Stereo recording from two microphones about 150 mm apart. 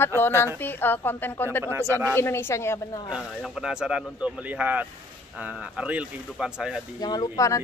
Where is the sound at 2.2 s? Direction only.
15° left (ahead or behind).